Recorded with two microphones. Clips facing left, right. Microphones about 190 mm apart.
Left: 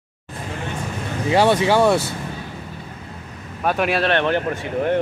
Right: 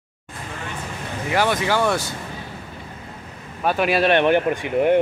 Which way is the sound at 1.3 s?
30° left (ahead or behind).